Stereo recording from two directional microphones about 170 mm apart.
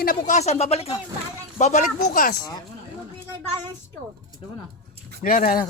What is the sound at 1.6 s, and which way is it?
Speech, 45° left (ahead or behind).